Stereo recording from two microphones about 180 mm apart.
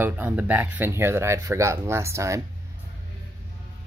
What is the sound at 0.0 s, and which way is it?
Speech, 10° right (ahead or behind).